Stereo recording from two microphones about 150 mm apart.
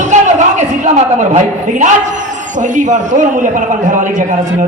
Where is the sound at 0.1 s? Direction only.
50° right (ahead or behind).